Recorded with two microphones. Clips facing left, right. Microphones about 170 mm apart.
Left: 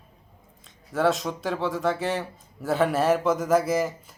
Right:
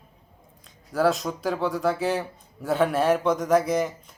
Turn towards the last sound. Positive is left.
turn(degrees=5)  # may be behind; listen again after turning